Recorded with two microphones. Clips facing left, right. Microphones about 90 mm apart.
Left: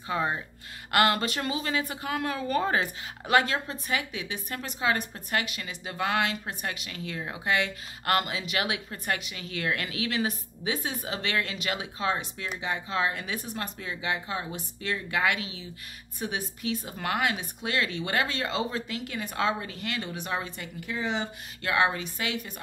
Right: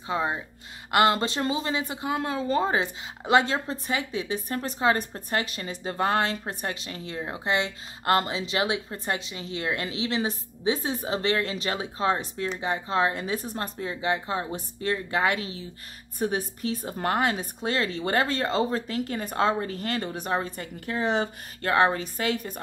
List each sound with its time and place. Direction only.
0.1 s speech: 15° right (ahead or behind); by 22.6 s 40° right (ahead or behind)